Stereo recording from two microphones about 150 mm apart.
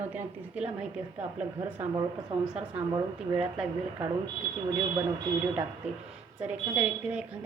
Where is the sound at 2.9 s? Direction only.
25° right (ahead or behind).